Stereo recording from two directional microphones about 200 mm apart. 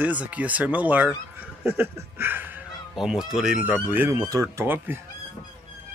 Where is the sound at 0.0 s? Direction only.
5° right (ahead or behind).